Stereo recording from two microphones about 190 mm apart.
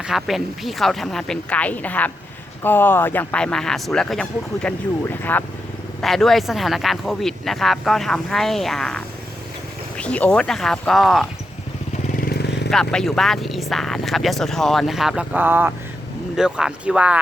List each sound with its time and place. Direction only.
0.0 s speech: centre (ahead or behind)
12.0 s vehicle: 50° left (ahead or behind)
12.7 s speech: 5° left (ahead or behind)